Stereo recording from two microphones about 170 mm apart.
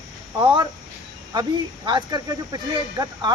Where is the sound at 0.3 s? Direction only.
25° right (ahead or behind).